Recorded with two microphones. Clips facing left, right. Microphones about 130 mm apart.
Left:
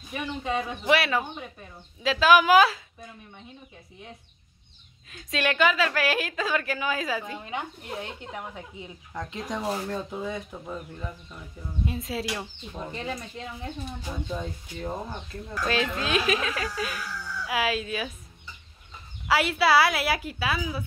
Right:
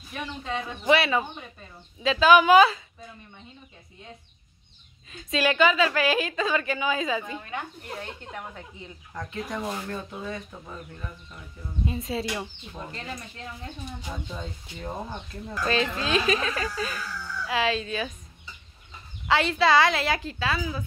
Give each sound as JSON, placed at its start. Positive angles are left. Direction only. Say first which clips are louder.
{"t": 0.1, "sound": "speech", "louder": "left 3 dB", "side_deg": 5}
{"t": 5.1, "sound": "speech", "louder": "right 2 dB", "side_deg": 0}
{"t": 7.4, "sound": "speech", "louder": "left 1 dB", "side_deg": 15}
{"t": 9.6, "sound": "speech", "louder": "left 4 dB", "side_deg": 35}
{"t": 9.8, "sound": "speech", "louder": "left 3 dB", "side_deg": 15}
{"t": 11.8, "sound": "speech", "louder": "right 1 dB", "side_deg": 0}
{"t": 12.9, "sound": "speech", "louder": "left 4 dB", "side_deg": 15}
{"t": 14.3, "sound": "speech", "louder": "left 4 dB", "side_deg": 0}
{"t": 19.2, "sound": "speech", "louder": "right 1 dB", "side_deg": 5}